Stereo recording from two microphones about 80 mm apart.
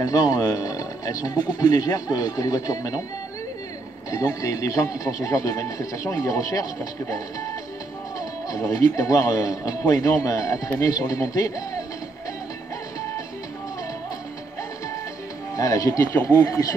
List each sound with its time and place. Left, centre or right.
0.0 s speech: left
4.1 s speech: left
15.5 s speech: left
16.1 s speech: left
16.3 s speech: left